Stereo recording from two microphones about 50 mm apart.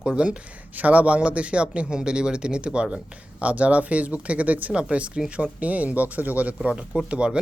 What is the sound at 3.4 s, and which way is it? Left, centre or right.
Speech, right.